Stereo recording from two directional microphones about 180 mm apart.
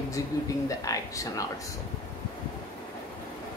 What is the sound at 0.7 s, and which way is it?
Speech, 20° left (ahead or behind).